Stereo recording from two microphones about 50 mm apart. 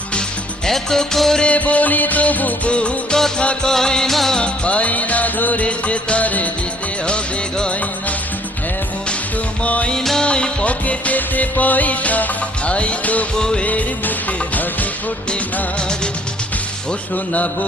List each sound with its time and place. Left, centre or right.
0.6 s music: centre
1.4 s music: left
3.2 s music: centre
4.4 s music: left
9.6 s music: left
9.9 s music: centre
10.2 s music: left
13.3 s music: centre
14.5 s music: left
17.3 s mantra: left